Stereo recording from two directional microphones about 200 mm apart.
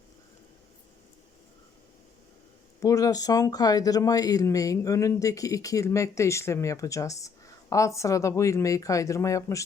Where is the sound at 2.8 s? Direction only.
15° left (ahead or behind).